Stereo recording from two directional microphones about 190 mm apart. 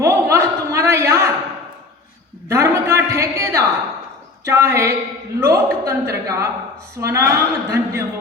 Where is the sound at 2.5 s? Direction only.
15° right (ahead or behind).